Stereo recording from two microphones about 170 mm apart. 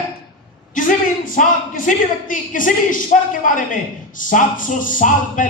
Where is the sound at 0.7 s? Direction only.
50° left (ahead or behind).